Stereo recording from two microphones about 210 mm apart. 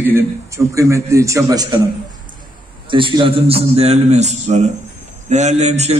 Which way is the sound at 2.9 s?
25° right (ahead or behind).